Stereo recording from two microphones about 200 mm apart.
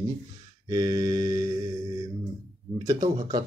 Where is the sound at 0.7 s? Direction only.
15° right (ahead or behind).